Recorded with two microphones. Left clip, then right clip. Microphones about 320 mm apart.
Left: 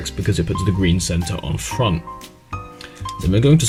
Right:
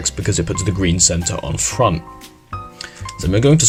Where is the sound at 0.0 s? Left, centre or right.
Centre.